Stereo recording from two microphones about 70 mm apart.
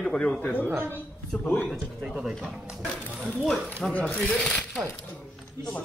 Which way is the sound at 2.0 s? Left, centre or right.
Centre.